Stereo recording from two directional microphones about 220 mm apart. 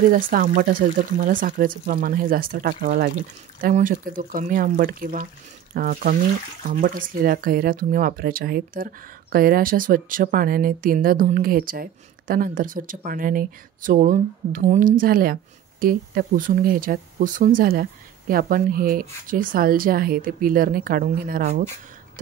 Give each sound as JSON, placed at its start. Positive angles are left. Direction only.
{"t": 0.1, "sound": "speech", "side_deg": -35}